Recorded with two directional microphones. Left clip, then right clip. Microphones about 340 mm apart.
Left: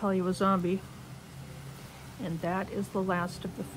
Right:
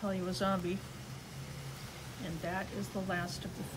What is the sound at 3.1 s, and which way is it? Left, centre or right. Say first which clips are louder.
Speech: left 5 dB; centre.